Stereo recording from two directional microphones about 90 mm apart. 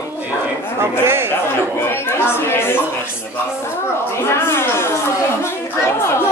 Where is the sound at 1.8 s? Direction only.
25° left (ahead or behind).